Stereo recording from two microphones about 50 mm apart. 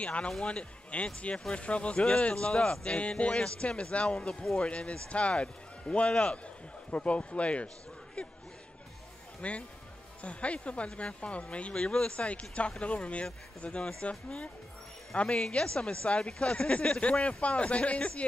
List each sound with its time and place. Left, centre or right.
0.0 s speech: left
9.4 s speech: left
12.1 s speech: left
15.1 s speech: left